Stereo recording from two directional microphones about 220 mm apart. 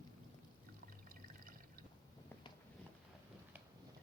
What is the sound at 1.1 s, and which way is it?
Drip, 40° right (ahead or behind).